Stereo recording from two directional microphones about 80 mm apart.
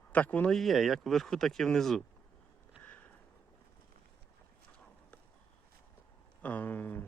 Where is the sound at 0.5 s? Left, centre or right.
Centre.